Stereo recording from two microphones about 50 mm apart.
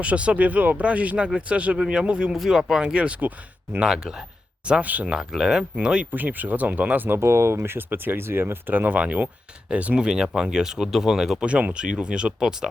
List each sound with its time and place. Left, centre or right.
0.0 s speech: right
2.3 s speech: centre
2.8 s speech: right
3.8 s speech: centre
4.8 s speech: right
5.3 s speech: centre
6.1 s speech: right
7.2 s speech: right; by 12.5 s centre